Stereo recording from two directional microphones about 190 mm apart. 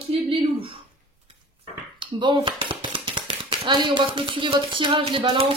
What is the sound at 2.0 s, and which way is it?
Speech, 25° right (ahead or behind).